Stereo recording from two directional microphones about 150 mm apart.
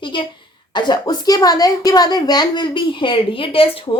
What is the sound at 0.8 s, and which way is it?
Speech, 25° left (ahead or behind).